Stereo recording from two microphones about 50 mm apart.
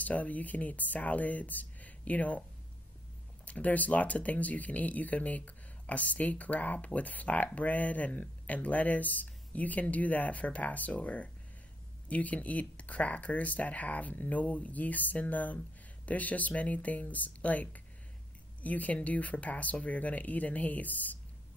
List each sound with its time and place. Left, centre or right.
0.0 s speech: left
3.4 s speech: left